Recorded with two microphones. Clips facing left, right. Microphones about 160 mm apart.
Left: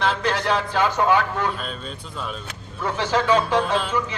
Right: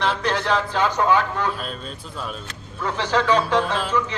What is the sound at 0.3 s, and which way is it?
Speech, 10° left (ahead or behind).